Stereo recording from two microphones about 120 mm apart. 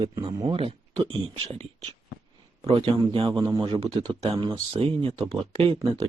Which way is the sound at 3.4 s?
35° right (ahead or behind).